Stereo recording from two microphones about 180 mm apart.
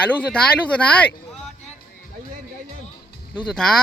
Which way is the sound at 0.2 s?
5° left (ahead or behind).